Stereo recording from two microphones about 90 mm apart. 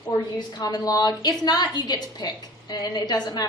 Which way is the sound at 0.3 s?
50° left (ahead or behind).